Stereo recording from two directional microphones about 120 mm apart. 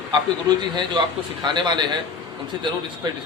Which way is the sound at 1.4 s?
40° right (ahead or behind).